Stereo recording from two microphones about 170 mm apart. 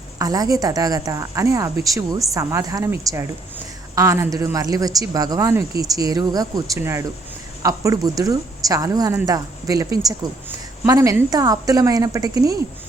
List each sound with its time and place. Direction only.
0.2 s a woman's voice: 20° right (ahead or behind)